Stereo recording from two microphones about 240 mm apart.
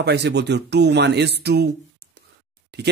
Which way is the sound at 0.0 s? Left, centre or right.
Right.